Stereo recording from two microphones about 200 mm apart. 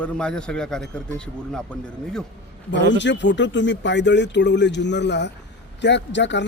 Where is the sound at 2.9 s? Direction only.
65° left (ahead or behind).